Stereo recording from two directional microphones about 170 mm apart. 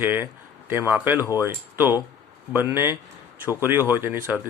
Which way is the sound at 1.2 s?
20° left (ahead or behind).